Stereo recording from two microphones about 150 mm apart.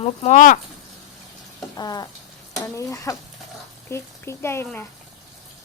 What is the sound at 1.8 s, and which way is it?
Speech, 25° left (ahead or behind).